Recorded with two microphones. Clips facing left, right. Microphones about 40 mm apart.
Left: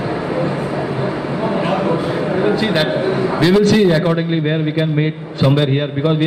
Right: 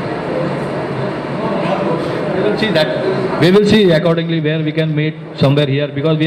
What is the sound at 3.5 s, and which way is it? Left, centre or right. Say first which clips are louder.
A woman's voice: right 3 dB; right.